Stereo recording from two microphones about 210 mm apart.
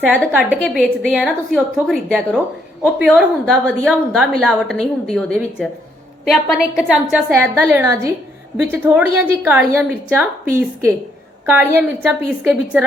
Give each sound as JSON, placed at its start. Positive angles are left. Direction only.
{"t": 0.6, "sound": "a woman's voice", "side_deg": 0}